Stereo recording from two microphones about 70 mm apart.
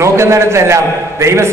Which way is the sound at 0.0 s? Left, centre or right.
Right.